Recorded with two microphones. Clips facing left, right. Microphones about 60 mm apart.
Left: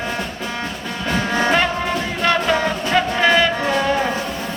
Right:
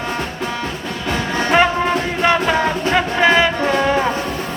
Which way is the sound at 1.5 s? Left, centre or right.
Centre.